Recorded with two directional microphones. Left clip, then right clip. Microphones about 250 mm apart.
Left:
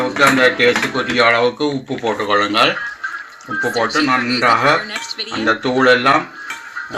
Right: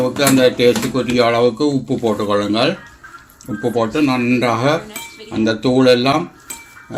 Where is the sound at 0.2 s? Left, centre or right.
Centre.